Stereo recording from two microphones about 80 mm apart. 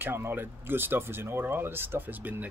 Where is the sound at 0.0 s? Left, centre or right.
Right.